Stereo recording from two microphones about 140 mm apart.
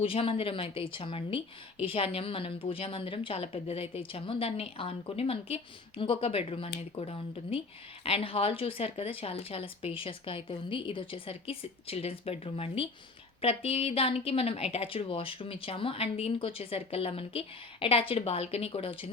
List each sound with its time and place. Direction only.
0.0 s speech: 40° left (ahead or behind)